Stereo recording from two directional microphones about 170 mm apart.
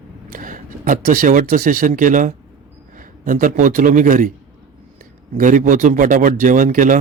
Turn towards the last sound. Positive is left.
turn(degrees=-50)  # may be behind; listen again after turning